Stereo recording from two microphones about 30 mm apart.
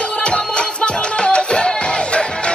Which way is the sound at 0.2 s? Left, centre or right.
Left.